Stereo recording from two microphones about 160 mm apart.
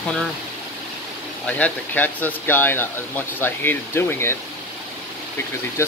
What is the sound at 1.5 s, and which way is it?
Speech, 10° left (ahead or behind).